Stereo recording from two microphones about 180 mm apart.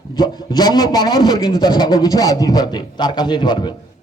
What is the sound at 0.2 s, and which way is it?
A man's voice, 20° left (ahead or behind).